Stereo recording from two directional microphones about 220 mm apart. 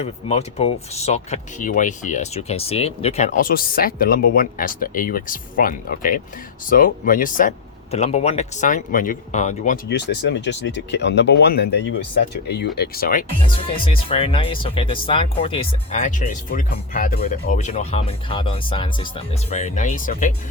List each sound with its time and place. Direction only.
0.0 s speech: 30° left (ahead or behind)
9.9 s speech: 50° left (ahead or behind)
13.8 s speech: 25° left (ahead or behind)
19.5 s speech: 35° left (ahead or behind)